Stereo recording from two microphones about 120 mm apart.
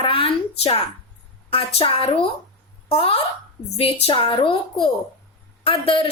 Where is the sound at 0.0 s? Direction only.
50° left (ahead or behind).